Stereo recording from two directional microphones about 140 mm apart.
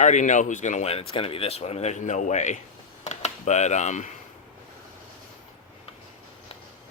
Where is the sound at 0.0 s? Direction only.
60° left (ahead or behind).